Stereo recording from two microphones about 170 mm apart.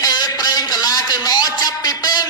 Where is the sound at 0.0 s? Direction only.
20° left (ahead or behind).